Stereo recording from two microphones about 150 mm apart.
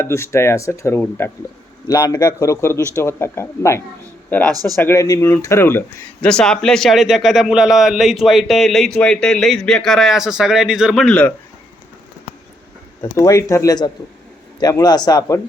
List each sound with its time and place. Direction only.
0.0 s speech: 20° left (ahead or behind)
6.2 s a man's voice: 5° left (ahead or behind)
13.0 s speech: 20° left (ahead or behind)